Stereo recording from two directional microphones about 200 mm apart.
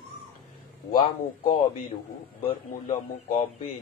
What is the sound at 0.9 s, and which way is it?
Speech, 40° left (ahead or behind).